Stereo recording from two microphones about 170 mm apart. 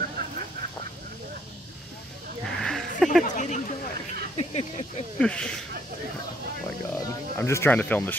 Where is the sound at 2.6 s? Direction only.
Centre (ahead or behind).